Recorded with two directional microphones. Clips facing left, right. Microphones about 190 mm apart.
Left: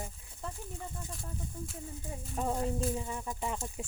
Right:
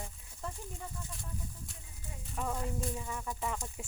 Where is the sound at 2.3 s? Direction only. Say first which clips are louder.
Left 4 dB; 30° left (ahead or behind).